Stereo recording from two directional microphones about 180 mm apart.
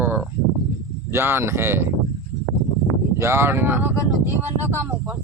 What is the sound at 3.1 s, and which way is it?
Speech, 15° right (ahead or behind).